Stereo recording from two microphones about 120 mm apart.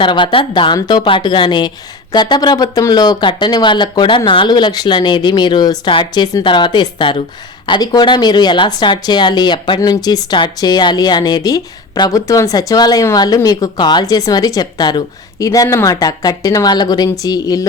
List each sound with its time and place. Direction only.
0.0 s a woman's voice: 45° left (ahead or behind)